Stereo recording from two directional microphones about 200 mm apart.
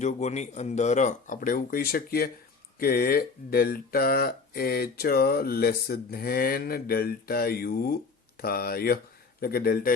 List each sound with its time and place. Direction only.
0.0 s speech: 35° left (ahead or behind)